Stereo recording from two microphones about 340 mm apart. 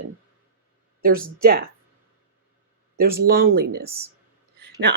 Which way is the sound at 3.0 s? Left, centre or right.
Right.